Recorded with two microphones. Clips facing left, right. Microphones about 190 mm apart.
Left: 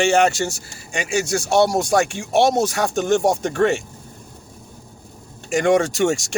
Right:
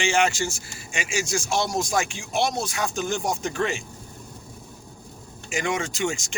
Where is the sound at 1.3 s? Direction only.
70° left (ahead or behind).